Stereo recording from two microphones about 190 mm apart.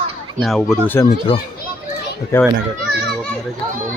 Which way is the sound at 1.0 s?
15° left (ahead or behind).